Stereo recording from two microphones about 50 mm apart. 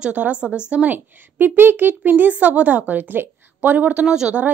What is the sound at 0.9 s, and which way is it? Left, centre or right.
Speech, right.